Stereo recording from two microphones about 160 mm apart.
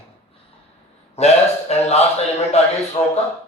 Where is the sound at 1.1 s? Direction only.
45° left (ahead or behind).